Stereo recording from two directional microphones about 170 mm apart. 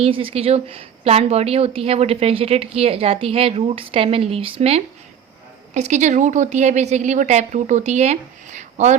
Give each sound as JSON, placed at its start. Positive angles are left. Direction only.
{"t": 0.0, "sound": "a woman's voice", "side_deg": -30}